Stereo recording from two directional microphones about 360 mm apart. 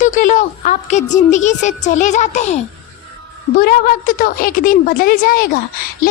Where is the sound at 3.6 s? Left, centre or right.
Left.